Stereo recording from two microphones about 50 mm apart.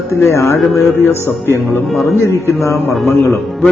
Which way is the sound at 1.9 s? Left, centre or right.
Left.